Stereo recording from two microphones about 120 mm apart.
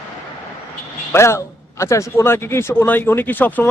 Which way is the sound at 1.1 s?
20° left (ahead or behind).